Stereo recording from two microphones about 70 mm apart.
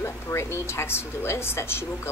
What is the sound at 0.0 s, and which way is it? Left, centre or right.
A woman's voice, left.